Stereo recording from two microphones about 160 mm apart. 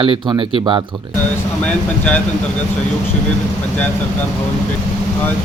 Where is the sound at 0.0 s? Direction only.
30° right (ahead or behind).